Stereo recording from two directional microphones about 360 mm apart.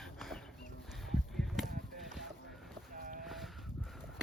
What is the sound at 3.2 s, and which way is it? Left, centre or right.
Sheep, centre.